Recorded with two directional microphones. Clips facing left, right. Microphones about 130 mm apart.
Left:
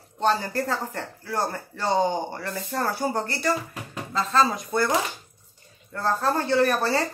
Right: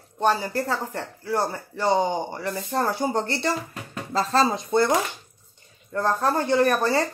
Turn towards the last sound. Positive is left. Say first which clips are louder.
# right 1 dB
turn(degrees=-15)  # may be behind; listen again after turning